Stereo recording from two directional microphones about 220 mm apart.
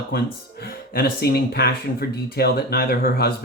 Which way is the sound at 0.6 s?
45° left (ahead or behind).